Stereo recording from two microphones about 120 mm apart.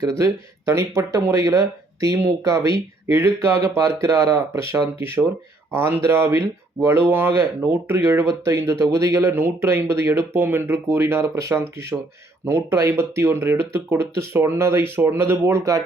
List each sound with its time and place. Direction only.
0.0 s speech: 25° right (ahead or behind)